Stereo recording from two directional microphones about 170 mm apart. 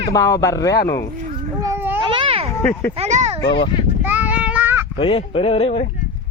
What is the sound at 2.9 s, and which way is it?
Speech, 40° right (ahead or behind).